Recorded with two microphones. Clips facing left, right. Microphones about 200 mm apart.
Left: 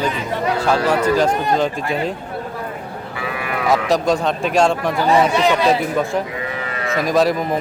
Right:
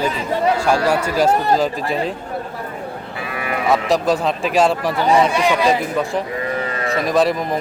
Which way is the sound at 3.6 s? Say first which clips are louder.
Even; centre (ahead or behind).